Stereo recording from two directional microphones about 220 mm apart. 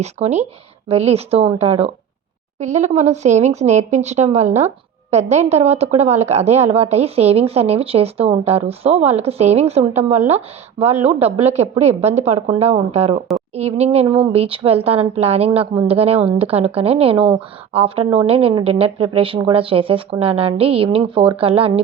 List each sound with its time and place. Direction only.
0.0 s speech: 30° right (ahead or behind)